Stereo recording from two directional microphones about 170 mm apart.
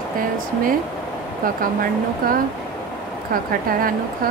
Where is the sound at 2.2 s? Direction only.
55° right (ahead or behind).